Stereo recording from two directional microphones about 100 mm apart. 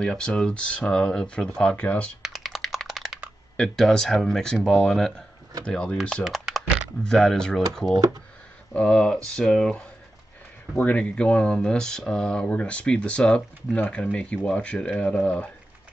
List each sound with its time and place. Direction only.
0.0 s speech: 5° left (ahead or behind)
2.2 s typing: centre (ahead or behind)
5.7 s speech: 10° left (ahead or behind)
6.2 s typing: centre (ahead or behind)
7.0 s speech: 5° left (ahead or behind)